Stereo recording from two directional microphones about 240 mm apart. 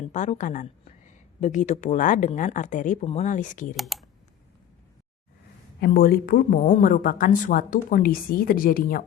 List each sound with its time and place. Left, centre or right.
0.1 s a woman's voice: left
3.8 s speech: centre
5.8 s a woman's voice: left